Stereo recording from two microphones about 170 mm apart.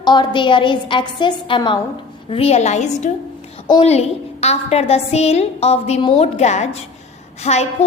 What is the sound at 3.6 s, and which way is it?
A woman's voice, 30° left (ahead or behind).